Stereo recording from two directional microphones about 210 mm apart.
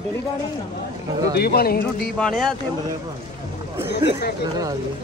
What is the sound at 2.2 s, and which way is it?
Speech, centre (ahead or behind).